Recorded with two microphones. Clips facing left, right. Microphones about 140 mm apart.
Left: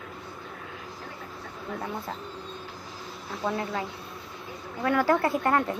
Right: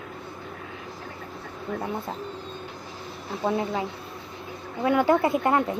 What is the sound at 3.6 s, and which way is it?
Speech, 20° right (ahead or behind).